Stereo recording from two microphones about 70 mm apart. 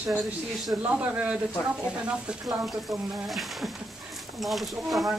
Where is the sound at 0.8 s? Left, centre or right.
Centre.